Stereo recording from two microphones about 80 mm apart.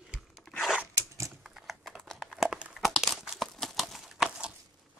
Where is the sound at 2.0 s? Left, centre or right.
Centre.